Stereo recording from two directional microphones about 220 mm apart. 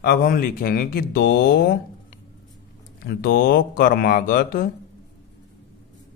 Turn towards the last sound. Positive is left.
turn(degrees=40)  # may be behind; listen again after turning